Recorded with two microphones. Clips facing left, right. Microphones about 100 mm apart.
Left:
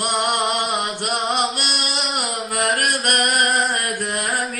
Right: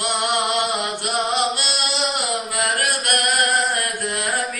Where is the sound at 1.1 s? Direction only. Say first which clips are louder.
Right 1 dB; 60° left (ahead or behind).